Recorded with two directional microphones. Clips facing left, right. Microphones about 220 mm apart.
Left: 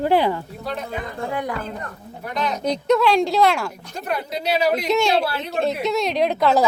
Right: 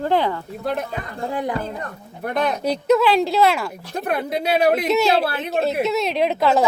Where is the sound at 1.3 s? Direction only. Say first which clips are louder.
Right 2 dB; 30° right (ahead or behind).